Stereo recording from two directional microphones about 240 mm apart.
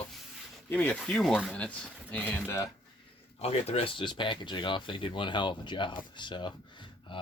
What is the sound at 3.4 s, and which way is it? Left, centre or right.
Speech, left.